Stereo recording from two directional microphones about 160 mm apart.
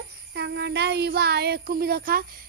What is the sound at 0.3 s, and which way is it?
Speech, 90° right.